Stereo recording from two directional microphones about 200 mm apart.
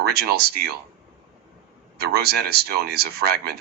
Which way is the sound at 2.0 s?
50° right (ahead or behind).